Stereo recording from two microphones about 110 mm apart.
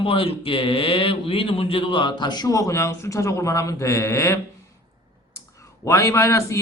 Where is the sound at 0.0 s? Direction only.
55° left (ahead or behind); by 4.4 s 25° left (ahead or behind).